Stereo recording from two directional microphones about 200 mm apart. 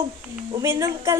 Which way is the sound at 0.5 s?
15° right (ahead or behind).